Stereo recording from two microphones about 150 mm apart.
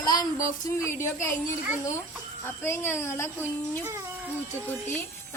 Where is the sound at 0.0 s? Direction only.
25° left (ahead or behind).